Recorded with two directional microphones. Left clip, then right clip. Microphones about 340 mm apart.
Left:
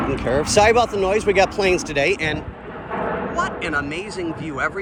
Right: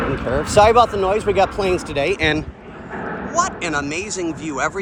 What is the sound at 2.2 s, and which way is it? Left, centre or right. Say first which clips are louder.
Speech: right 5 dB; right.